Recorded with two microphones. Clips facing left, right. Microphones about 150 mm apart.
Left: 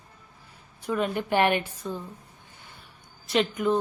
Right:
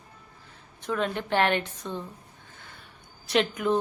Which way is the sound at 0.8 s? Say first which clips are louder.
Left 2 dB; 5° left (ahead or behind).